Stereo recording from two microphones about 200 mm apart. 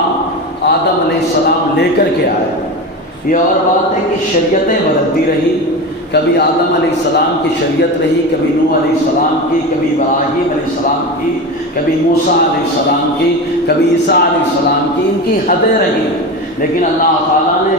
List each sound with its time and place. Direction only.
13.7 s music: 55° left (ahead or behind)